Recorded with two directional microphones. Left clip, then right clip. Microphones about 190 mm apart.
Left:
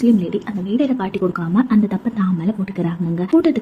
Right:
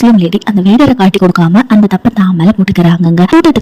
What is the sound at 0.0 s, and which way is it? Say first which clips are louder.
Speech: right 9 dB; 45° right (ahead or behind).